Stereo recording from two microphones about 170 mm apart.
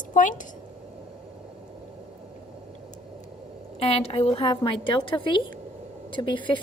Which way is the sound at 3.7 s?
35° left (ahead or behind).